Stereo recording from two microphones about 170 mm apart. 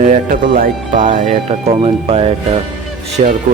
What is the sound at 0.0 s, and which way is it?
Speech, 50° right (ahead or behind).